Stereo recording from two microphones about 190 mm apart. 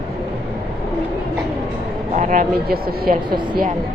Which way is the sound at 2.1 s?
45° right (ahead or behind).